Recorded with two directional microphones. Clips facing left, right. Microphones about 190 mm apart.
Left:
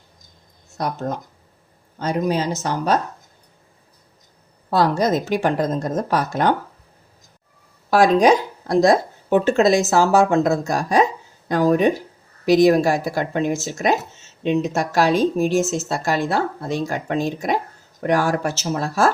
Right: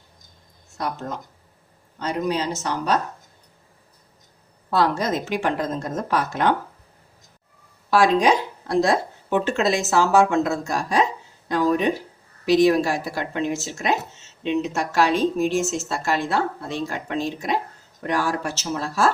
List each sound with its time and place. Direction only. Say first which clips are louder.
0.8 s speech: left 4 dB; 40° left (ahead or behind)
4.7 s speech: left 3 dB; 40° left (ahead or behind)
7.9 s speech: left 3 dB; 40° left (ahead or behind)